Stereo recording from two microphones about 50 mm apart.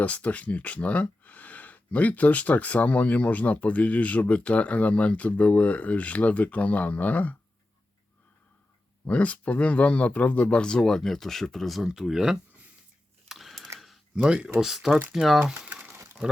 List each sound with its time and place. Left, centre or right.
0.0 s speech: left
9.0 s speech: left; by 12.4 s centre
13.2 s typewriter: centre
13.7 s computer keyboard: centre
14.2 s speech: centre